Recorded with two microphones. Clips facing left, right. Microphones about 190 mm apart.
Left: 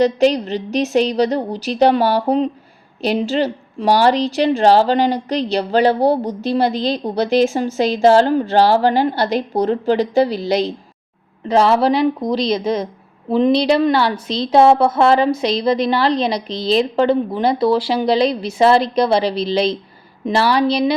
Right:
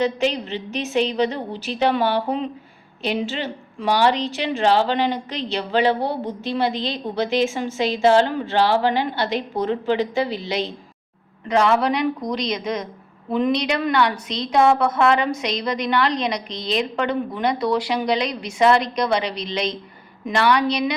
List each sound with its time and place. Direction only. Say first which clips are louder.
0.0 s a woman's voice: left 7 dB; 40° left (ahead or behind)